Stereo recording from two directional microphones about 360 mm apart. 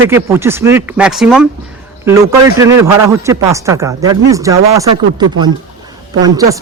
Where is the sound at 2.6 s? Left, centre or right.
Centre.